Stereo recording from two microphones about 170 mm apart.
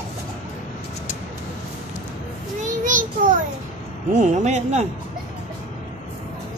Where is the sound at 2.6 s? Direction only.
50° right (ahead or behind).